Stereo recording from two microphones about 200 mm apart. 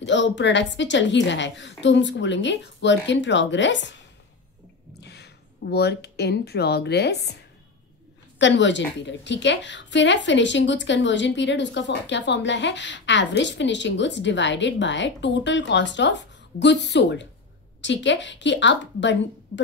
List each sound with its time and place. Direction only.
0.0 s a woman's voice: 65° left (ahead or behind)
5.0 s speech: 55° left (ahead or behind)
8.4 s a woman's voice: 65° left (ahead or behind)